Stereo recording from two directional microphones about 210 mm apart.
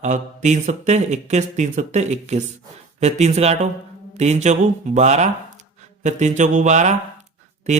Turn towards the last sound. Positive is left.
turn(degrees=-35)  # may be behind; listen again after turning